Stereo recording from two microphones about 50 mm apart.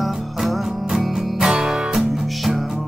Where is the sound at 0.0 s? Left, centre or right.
Centre.